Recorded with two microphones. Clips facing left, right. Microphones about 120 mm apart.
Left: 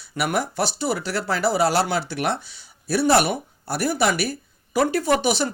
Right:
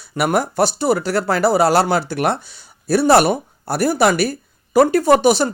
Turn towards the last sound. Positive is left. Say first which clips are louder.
# right 7 dB
turn(degrees=-45)  # may be behind; listen again after turning